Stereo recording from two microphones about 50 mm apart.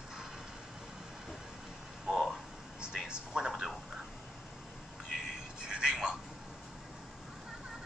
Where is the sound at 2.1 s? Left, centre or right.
Centre.